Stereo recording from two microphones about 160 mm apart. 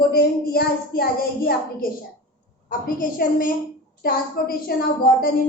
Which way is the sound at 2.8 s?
60° left (ahead or behind).